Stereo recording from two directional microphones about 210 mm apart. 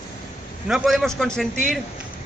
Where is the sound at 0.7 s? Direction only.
Centre (ahead or behind).